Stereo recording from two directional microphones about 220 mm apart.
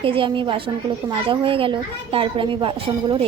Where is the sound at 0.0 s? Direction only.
25° right (ahead or behind).